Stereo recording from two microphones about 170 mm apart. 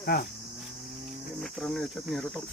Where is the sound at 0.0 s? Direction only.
60° left (ahead or behind).